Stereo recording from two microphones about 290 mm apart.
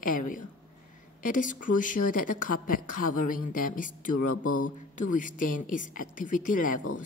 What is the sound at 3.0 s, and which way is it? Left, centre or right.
Speech, left.